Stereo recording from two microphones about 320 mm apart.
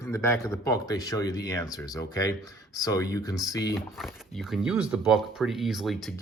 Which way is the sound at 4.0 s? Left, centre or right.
Centre.